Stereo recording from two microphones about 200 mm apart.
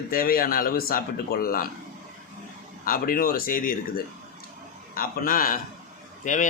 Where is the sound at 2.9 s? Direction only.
45° left (ahead or behind).